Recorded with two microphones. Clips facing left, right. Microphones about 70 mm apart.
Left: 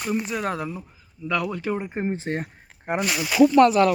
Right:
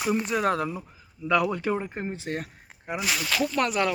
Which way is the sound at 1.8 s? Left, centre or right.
Centre.